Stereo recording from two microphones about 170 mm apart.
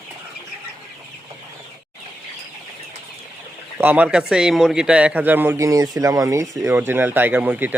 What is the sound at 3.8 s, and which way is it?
Speech, 10° right (ahead or behind).